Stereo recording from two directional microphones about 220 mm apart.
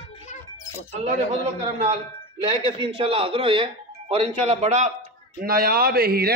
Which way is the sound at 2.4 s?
25° right (ahead or behind).